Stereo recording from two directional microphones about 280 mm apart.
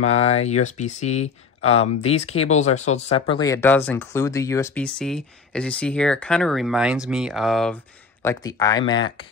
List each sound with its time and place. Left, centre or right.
0.0 s speech: left; by 7.7 s centre
8.2 s speech: centre